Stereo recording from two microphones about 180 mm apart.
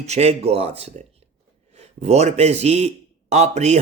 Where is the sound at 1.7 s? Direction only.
35° right (ahead or behind).